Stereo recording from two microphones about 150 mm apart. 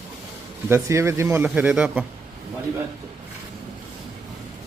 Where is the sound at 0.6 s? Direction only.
15° right (ahead or behind).